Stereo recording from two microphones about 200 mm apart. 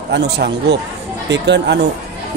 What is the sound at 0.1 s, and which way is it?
Speech, 60° right (ahead or behind).